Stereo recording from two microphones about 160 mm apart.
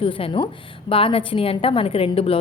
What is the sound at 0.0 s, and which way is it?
A woman's voice, 35° left (ahead or behind).